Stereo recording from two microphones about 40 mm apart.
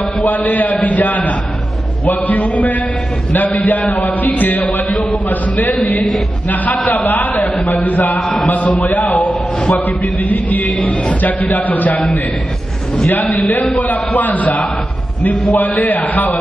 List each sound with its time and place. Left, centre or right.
0.2 s a man's voice: left
8.2 s speech: centre
8.5 s a man's voice: left
13.2 s a man's voice: left